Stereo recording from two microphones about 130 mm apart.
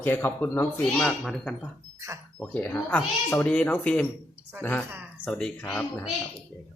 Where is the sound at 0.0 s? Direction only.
15° left (ahead or behind).